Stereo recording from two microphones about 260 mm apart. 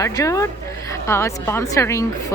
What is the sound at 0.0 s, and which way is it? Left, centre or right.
Speech, centre.